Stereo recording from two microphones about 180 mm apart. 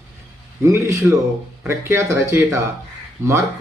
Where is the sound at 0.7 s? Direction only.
15° right (ahead or behind).